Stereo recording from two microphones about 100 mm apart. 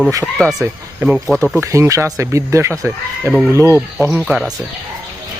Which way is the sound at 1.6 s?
30° right (ahead or behind).